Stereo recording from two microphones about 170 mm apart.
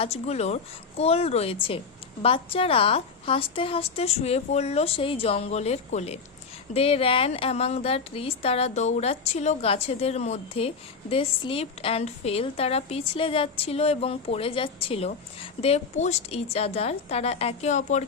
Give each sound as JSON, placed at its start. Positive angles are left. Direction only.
{"t": 0.0, "sound": "a woman's voice", "side_deg": 40}